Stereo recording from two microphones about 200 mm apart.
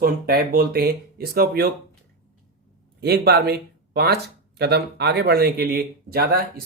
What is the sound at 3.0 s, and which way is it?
Speech, 50° right (ahead or behind).